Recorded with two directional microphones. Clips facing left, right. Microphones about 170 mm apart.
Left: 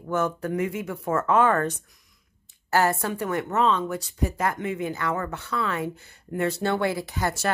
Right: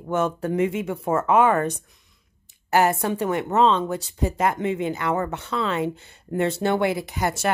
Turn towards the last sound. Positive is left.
turn(degrees=-20)  # may be behind; listen again after turning